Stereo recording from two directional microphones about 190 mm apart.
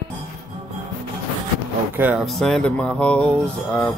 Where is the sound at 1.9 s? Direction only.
5° right (ahead or behind).